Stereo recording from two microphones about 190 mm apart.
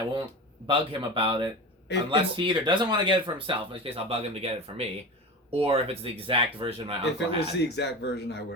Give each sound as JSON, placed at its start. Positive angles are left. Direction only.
{"t": 0.7, "sound": "speech", "side_deg": -30}
{"t": 7.0, "sound": "speech", "side_deg": 60}